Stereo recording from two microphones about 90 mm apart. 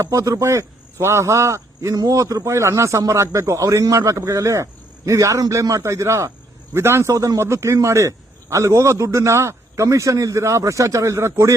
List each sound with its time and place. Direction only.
0.0 s a man's voice: 35° right (ahead or behind)